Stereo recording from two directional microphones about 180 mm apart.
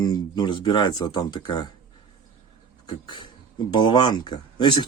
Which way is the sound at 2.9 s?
25° left (ahead or behind).